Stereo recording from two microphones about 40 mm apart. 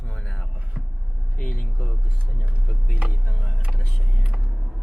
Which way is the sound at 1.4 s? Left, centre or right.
Left.